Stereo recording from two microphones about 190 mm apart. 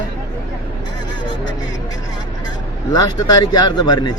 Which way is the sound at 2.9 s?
20° left (ahead or behind).